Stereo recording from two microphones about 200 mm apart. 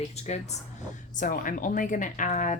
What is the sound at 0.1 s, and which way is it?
A woman's voice, 35° left (ahead or behind).